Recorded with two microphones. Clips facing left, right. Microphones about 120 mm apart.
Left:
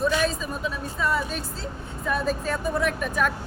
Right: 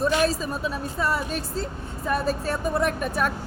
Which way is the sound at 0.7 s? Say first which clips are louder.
Left 2 dB; 40° right (ahead or behind).